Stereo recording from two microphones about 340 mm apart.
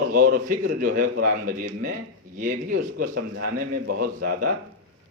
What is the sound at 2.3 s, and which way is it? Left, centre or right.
Speech, right.